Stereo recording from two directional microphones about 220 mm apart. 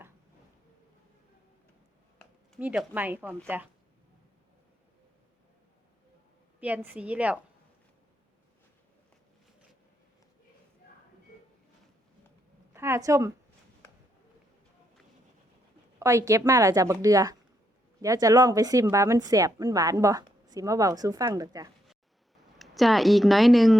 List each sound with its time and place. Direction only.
2.1 s speech: 5° right (ahead or behind)
6.6 s a woman's voice: 5° right (ahead or behind)
12.7 s a woman's voice: 10° right (ahead or behind)
16.0 s a woman's voice: 15° right (ahead or behind)
22.5 s speech: centre (ahead or behind)